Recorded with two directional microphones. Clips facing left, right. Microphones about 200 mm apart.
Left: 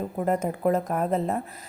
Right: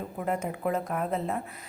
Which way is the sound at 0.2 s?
40° left (ahead or behind).